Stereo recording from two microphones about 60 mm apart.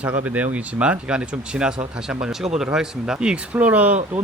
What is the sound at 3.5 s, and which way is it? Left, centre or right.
Speech, right.